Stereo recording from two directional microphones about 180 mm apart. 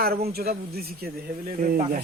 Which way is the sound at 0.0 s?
60° right (ahead or behind).